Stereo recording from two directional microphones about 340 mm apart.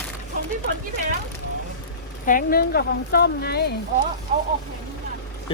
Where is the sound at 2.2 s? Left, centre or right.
Left.